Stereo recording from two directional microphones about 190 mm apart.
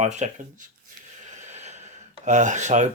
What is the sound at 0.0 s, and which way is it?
Speech, 40° right (ahead or behind).